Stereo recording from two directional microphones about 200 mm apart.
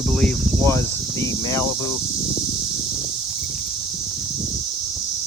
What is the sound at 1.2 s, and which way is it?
Speech, 15° left (ahead or behind).